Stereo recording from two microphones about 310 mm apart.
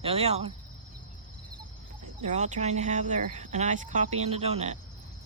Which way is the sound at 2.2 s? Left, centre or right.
Right.